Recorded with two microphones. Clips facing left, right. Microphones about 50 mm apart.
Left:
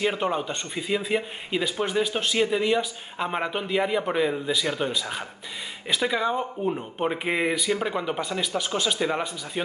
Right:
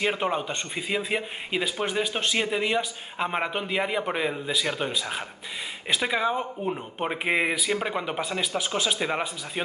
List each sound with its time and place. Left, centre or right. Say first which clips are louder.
0.0 s a man's voice: left 1 dB; centre
9.0 s a man's voice: left 2 dB; centre